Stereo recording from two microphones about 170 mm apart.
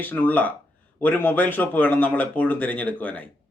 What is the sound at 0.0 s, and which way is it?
Speech, 10° left (ahead or behind).